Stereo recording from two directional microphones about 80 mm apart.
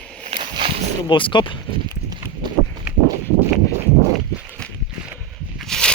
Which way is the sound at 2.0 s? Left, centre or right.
Right.